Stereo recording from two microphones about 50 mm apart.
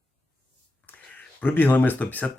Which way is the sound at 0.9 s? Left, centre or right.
Left.